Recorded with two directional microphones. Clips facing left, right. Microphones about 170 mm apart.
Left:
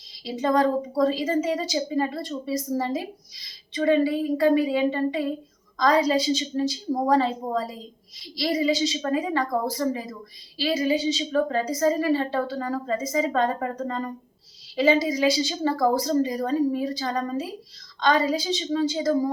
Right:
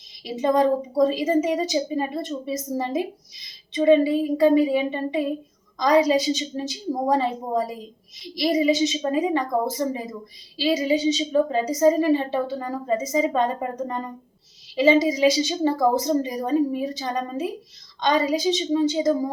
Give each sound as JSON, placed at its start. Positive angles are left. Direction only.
{"t": 0.3, "sound": "a woman's voice", "side_deg": -20}